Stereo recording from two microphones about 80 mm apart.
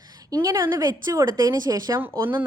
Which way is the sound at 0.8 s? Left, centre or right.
Right.